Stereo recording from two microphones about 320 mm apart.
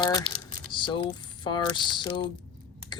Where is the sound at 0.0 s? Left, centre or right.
Centre.